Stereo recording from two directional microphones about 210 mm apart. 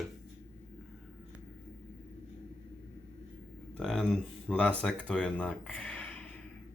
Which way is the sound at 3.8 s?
5° left (ahead or behind).